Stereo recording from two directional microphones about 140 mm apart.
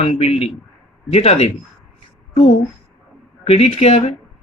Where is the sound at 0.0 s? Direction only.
45° left (ahead or behind).